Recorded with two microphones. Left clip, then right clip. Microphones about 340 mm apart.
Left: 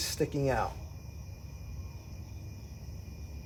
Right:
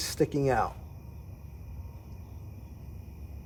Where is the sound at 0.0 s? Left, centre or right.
Right.